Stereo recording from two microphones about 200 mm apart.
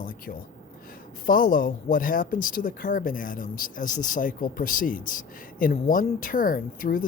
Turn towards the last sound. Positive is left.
turn(degrees=45)  # may be behind; listen again after turning